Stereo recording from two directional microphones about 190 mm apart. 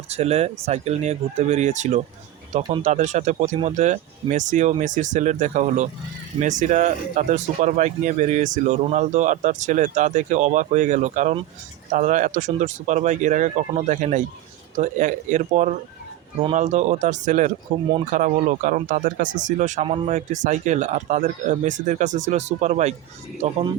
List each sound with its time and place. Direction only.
0.1 s speech: 35° right (ahead or behind)